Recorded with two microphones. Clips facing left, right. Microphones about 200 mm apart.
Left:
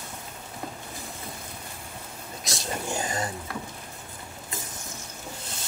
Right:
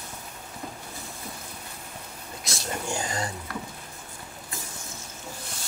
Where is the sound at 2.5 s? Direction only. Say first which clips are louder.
Even; 20° left (ahead or behind).